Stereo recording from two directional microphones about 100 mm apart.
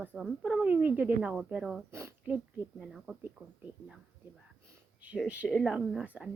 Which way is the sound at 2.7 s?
Centre (ahead or behind).